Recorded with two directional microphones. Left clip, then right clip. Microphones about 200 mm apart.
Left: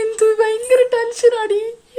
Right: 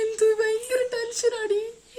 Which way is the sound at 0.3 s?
30° right (ahead or behind).